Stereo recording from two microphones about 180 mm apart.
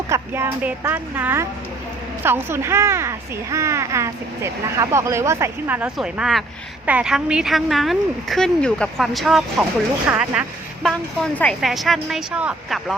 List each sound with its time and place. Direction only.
0.1 s a woman's voice: 15° right (ahead or behind)
10.8 s a woman's voice: 5° left (ahead or behind)